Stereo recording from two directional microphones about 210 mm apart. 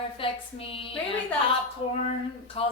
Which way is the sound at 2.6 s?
25° left (ahead or behind).